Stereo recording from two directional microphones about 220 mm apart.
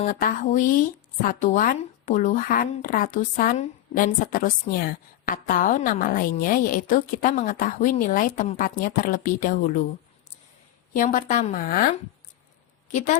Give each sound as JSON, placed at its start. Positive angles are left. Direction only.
{"t": 0.0, "sound": "speech", "side_deg": 40}
{"t": 10.9, "sound": "speech", "side_deg": 35}
{"t": 12.9, "sound": "a woman's voice", "side_deg": 35}